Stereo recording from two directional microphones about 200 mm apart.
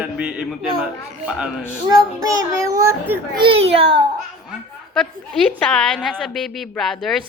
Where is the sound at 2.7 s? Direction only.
15° right (ahead or behind).